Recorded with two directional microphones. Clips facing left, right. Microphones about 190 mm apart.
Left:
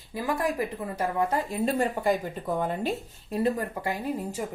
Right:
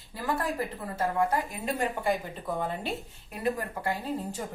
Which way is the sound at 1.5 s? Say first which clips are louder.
Left 5 dB; 35° left (ahead or behind).